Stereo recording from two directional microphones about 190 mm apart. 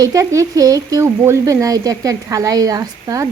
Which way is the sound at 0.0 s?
15° right (ahead or behind).